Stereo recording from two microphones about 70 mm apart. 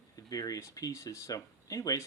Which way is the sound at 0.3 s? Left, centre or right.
Left.